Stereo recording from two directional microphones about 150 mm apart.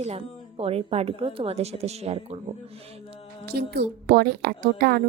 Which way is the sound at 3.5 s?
90° right.